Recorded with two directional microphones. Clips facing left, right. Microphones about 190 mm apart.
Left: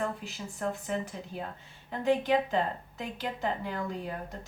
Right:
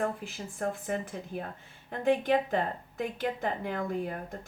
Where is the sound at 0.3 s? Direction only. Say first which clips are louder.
Right 1 dB; 50° right (ahead or behind).